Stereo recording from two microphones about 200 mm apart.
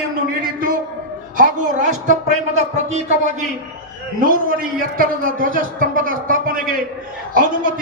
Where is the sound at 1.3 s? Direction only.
40° right (ahead or behind).